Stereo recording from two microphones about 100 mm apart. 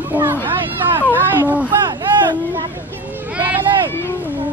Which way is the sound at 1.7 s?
50° right (ahead or behind).